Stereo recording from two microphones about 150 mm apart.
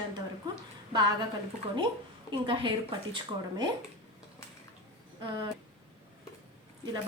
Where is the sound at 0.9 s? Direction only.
30° right (ahead or behind).